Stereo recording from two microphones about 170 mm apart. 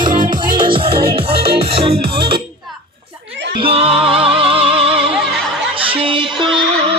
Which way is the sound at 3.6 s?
35° right (ahead or behind).